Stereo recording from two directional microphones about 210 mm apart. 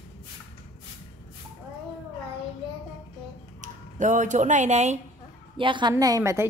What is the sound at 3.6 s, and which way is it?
Speech, 35° right (ahead or behind).